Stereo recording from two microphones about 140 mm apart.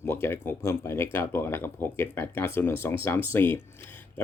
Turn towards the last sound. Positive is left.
turn(degrees=15)  # may be behind; listen again after turning